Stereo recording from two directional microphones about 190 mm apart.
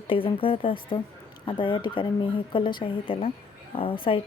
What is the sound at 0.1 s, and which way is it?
A woman's voice, 30° left (ahead or behind).